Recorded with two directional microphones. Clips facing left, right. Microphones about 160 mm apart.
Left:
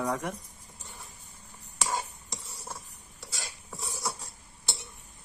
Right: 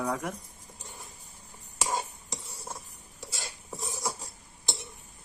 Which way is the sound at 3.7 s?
30° right (ahead or behind).